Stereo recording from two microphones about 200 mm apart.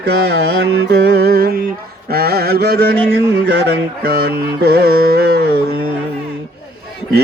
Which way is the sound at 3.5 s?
60° right (ahead or behind).